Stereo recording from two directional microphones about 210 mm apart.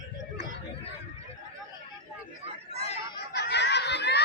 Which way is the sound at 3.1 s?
55° left (ahead or behind).